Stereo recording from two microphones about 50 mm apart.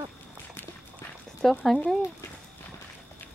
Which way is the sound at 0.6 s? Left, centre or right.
Left.